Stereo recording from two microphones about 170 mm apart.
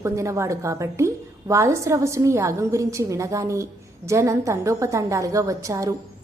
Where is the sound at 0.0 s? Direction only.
15° right (ahead or behind).